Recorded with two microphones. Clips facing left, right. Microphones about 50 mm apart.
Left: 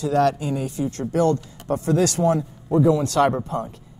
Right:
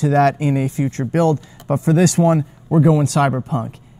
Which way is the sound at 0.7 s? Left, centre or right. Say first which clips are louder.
Right 4 dB; right.